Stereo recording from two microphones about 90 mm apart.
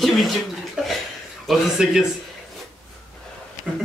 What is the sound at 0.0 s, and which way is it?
Speech, centre (ahead or behind).